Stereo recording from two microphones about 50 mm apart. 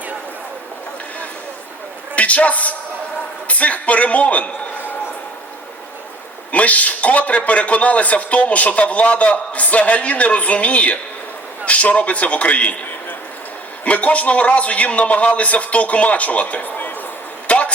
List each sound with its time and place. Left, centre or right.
2.1 s a woman's voice: left
6.5 s a man's voice: left
13.8 s a man's voice: left
17.5 s a sound: left